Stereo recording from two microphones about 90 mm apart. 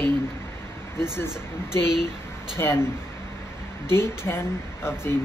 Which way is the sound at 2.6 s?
30° left (ahead or behind).